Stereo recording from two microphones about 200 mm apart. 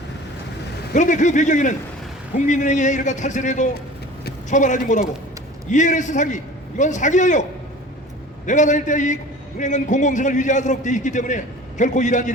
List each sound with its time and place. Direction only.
0.9 s a man's voice: 40° left (ahead or behind)
8.4 s a man's voice: 35° left (ahead or behind)